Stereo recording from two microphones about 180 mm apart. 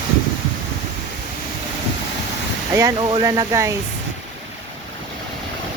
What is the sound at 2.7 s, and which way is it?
Speech, 15° right (ahead or behind).